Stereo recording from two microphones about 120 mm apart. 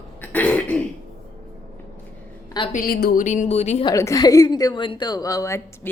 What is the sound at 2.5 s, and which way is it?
Speech, 35° left (ahead or behind).